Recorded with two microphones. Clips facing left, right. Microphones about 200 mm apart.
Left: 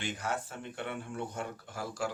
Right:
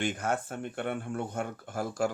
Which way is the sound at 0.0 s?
50° right (ahead or behind).